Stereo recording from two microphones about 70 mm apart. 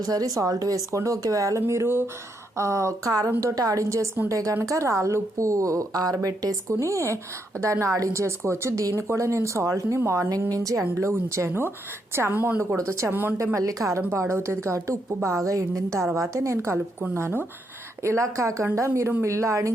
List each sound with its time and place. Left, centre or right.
0.0 s a woman's voice: right
2.6 s a woman's voice: right
13.4 s a woman's voice: right
14.1 s a woman's voice: right